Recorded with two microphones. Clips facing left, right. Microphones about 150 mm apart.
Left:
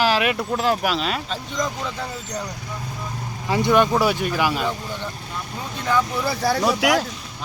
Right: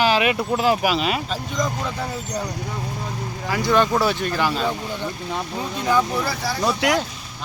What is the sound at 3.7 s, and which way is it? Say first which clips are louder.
Speech: even; 10° left (ahead or behind).